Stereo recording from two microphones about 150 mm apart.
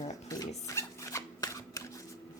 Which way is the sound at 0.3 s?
20° left (ahead or behind).